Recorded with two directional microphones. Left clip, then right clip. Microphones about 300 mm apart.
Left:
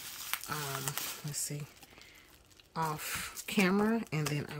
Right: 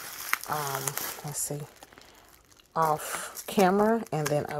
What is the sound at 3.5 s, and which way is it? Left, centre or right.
Speech, centre.